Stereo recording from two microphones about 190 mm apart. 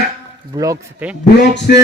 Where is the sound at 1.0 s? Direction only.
10° right (ahead or behind).